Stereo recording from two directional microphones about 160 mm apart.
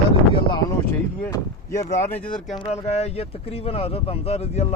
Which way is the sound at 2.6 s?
40° left (ahead or behind).